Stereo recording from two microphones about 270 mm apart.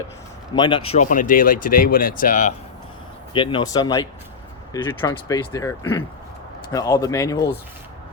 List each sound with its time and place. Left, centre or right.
0.5 s speech: centre
3.3 s speech: centre